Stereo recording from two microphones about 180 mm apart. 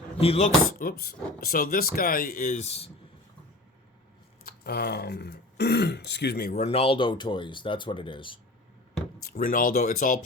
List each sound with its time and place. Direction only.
0.2 s speech: 35° left (ahead or behind)
0.8 s speech: 55° left (ahead or behind); by 2.9 s 35° left (ahead or behind)
4.4 s speech: 60° left (ahead or behind)
6.6 s speech: 35° left (ahead or behind)
9.2 s speech: 55° left (ahead or behind)